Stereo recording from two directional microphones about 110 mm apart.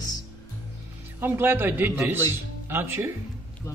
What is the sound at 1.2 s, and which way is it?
Speech, 20° right (ahead or behind).